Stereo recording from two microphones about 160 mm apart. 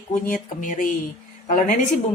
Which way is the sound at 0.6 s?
50° left (ahead or behind).